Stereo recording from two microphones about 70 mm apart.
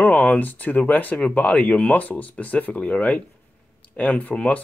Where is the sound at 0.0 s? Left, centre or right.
Left.